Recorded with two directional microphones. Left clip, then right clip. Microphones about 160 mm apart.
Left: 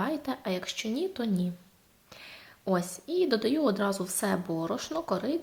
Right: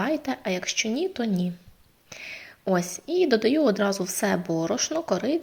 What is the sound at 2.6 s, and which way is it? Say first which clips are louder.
A woman's voice: right 5 dB; 10° right (ahead or behind).